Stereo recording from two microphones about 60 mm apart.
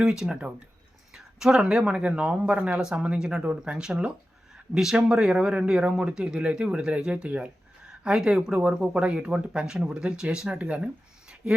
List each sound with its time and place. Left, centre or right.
0.0 s speech: centre